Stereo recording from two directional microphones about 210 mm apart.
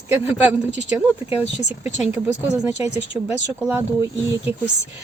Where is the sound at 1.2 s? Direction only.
5° right (ahead or behind).